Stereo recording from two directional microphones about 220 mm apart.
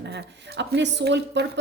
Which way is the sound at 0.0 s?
50° right (ahead or behind).